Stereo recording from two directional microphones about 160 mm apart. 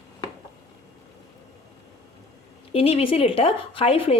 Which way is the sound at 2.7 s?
35° left (ahead or behind).